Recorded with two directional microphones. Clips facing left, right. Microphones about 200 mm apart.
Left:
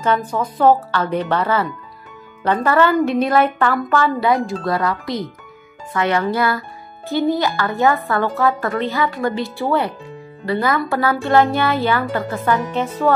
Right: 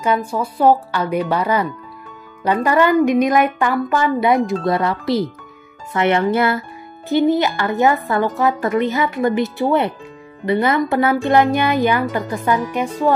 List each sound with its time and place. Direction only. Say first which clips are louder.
0.0 s speech: even; 10° right (ahead or behind)